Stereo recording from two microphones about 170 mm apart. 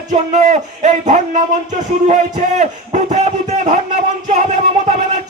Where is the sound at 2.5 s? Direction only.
45° right (ahead or behind).